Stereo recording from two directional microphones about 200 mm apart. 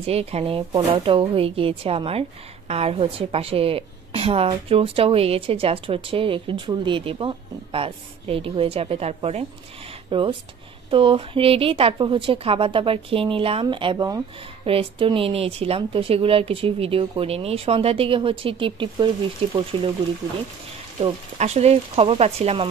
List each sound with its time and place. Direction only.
0.0 s a woman's voice: 30° right (ahead or behind)
21.0 s speech: 35° right (ahead or behind)